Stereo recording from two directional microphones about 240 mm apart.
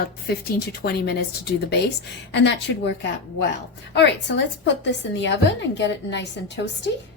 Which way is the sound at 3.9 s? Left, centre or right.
Left.